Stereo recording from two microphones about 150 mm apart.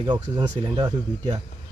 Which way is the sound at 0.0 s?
30° right (ahead or behind).